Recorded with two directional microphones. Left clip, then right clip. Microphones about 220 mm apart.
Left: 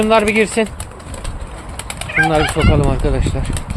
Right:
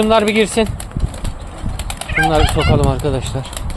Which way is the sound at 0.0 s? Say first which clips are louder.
Even; 10° right (ahead or behind).